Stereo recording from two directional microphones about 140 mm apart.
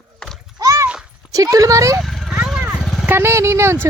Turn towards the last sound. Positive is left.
turn(degrees=-20)  # may be behind; listen again after turning